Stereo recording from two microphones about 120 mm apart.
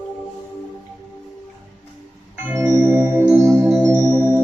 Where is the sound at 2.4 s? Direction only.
20° right (ahead or behind).